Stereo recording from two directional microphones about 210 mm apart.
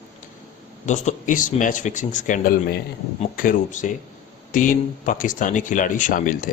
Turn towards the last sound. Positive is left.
turn(degrees=40)  # may be behind; listen again after turning